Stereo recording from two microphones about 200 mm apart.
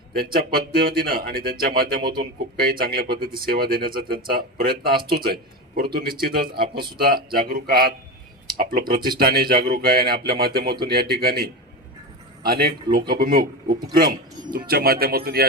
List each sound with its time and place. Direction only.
0.1 s speech: 50° right (ahead or behind)